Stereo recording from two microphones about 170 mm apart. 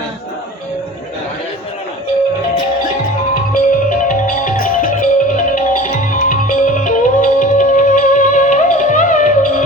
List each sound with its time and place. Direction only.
3.5 s music: 50° left (ahead or behind)